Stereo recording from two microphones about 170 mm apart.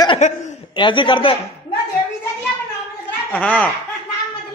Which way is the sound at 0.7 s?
30° left (ahead or behind).